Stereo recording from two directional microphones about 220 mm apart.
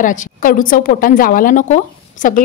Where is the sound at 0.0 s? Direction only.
35° left (ahead or behind).